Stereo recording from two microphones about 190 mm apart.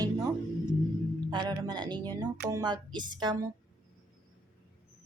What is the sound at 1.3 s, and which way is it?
A woman's voice, 20° right (ahead or behind).